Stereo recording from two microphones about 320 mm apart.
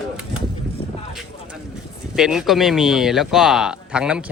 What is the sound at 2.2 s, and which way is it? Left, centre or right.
Speech, centre.